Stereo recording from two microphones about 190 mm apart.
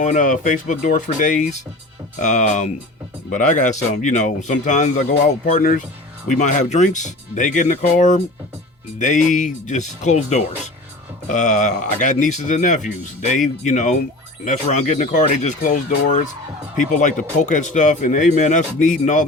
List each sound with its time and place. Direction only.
0.0 s speech: 40° left (ahead or behind)